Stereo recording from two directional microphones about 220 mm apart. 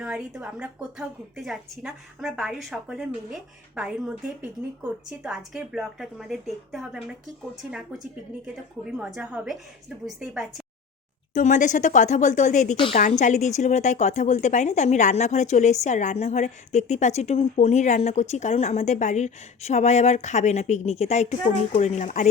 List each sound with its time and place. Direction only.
0.0 s a woman's voice: 5° right (ahead or behind)
11.3 s speech: 35° left (ahead or behind)
13.1 s speech: 35° left (ahead or behind)